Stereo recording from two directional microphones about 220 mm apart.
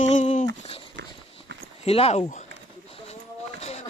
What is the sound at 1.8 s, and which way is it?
Speech, 25° left (ahead or behind).